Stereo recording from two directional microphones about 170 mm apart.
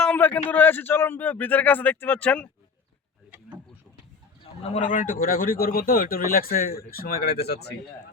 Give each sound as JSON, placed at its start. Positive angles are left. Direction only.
{"t": 0.0, "sound": "a man's voice", "side_deg": 10}
{"t": 4.6, "sound": "speech", "side_deg": 45}